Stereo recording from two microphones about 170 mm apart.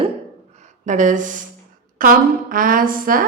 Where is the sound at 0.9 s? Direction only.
45° right (ahead or behind).